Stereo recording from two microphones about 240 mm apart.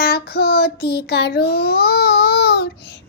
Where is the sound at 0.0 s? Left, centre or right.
Left.